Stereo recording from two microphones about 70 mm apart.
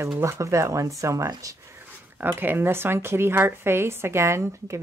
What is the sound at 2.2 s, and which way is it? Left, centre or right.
Speech, right.